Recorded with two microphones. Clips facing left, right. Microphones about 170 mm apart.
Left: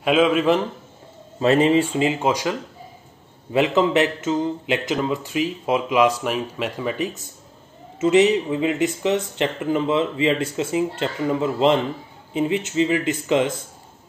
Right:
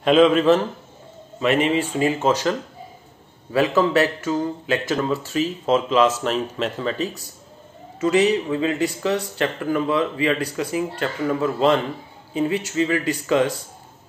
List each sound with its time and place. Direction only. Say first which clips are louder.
0.0 s a man's voice: right 3 dB; 5° left (ahead or behind)
1.4 s speech: left 3 dB; 35° left (ahead or behind); by 2.5 s 15° left (ahead or behind)
3.5 s a man's voice: even; 20° left (ahead or behind)